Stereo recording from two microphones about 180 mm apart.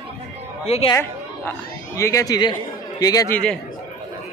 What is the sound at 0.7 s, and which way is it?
Speech, 35° left (ahead or behind).